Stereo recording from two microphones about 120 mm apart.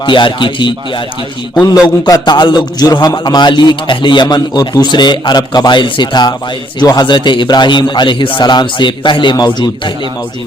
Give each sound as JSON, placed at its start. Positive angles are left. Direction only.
{"t": 0.0, "sound": "a man's voice", "side_deg": 40}
{"t": 2.0, "sound": "a man's voice", "side_deg": 35}